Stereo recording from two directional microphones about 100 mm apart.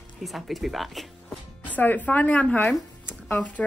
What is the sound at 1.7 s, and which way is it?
Speech, 15° left (ahead or behind).